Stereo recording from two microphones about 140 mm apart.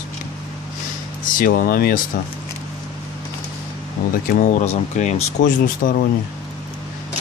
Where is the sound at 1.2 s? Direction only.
85° left.